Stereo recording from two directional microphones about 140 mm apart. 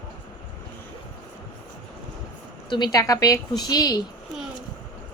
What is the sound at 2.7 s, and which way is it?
Speech, 30° left (ahead or behind).